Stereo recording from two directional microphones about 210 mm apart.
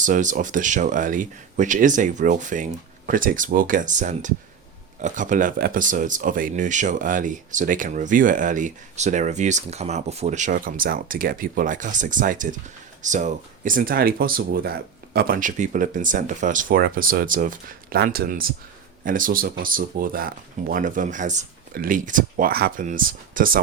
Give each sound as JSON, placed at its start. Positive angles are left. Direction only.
{"t": 0.0, "sound": "speech", "side_deg": -35}